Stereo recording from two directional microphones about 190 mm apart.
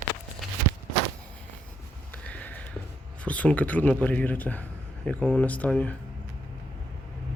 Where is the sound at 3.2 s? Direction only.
5° left (ahead or behind).